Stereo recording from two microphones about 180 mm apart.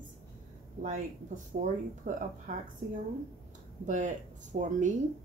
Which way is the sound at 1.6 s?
45° right (ahead or behind).